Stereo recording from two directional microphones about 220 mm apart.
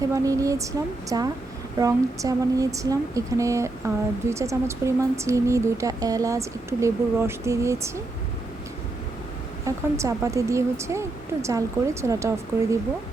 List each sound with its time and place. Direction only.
0.0 s speech: 15° right (ahead or behind)
9.6 s speech: 15° right (ahead or behind)